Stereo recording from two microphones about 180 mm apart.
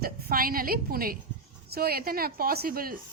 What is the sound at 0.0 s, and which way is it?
A woman's voice, 55° right (ahead or behind).